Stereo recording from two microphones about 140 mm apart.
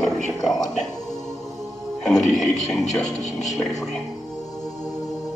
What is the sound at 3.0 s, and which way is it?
Speech, 25° left (ahead or behind).